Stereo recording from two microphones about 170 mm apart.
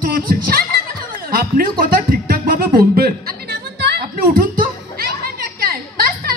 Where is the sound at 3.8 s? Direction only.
60° right (ahead or behind).